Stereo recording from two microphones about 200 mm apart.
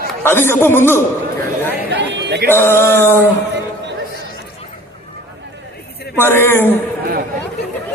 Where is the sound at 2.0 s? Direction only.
60° right (ahead or behind).